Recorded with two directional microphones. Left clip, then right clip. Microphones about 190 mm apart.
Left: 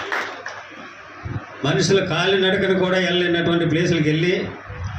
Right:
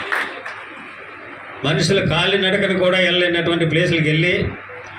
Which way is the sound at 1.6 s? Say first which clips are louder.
Right 1 dB; 50° left (ahead or behind).